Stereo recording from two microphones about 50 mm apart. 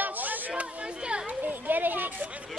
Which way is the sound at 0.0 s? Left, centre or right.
Right.